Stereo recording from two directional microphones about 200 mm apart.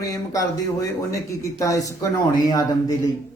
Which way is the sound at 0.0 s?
15° left (ahead or behind).